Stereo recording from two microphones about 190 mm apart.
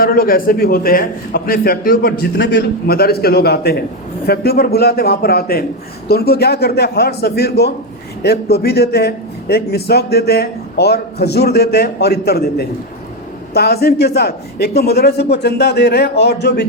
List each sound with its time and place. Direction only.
0.0 s a man's voice: 50° left (ahead or behind)
2.4 s a man's voice: 70° left (ahead or behind)